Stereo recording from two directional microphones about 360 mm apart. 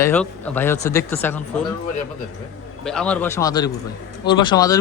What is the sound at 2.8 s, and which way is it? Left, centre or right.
Speech, centre.